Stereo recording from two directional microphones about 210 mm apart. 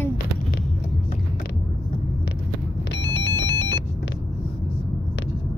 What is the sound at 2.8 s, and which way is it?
Rumble, 55° left (ahead or behind).